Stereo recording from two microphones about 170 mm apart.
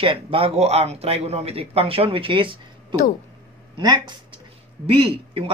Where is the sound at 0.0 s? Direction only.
30° right (ahead or behind).